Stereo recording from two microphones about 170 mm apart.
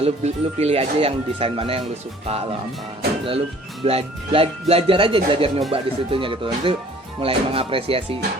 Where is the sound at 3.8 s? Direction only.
35° right (ahead or behind).